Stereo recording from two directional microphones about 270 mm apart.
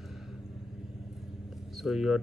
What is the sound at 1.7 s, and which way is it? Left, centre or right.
Speech, centre.